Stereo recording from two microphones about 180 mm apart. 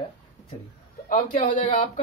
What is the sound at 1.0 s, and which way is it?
Speech, 45° left (ahead or behind).